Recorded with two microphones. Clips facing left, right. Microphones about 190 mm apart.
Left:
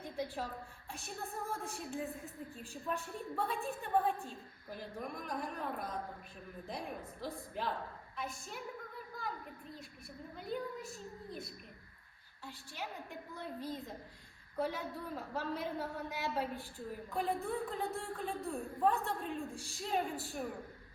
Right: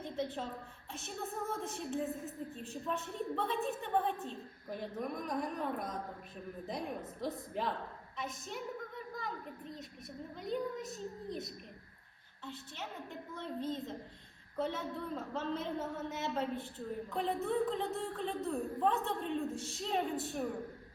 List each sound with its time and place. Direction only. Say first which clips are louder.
1.0 s a woman's voice: right 3 dB; centre (ahead or behind)
13.6 s a woman's voice: right 5 dB; 20° right (ahead or behind)
14.7 s a woman's voice: right 2 dB; centre (ahead or behind)
15.4 s a woman's voice: right 1 dB; 20° right (ahead or behind)
16.9 s a woman's voice: right 1 dB; centre (ahead or behind)